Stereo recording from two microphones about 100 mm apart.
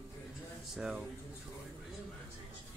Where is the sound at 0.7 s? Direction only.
5° right (ahead or behind).